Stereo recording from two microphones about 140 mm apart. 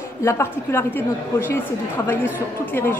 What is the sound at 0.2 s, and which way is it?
A woman's voice, 20° left (ahead or behind).